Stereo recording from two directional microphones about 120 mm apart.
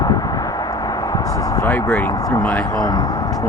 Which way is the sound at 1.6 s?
20° left (ahead or behind).